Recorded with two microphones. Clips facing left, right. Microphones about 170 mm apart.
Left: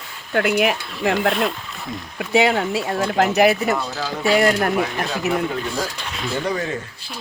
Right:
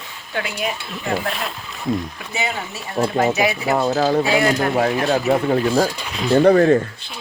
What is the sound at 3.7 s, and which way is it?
Speech, 50° right (ahead or behind).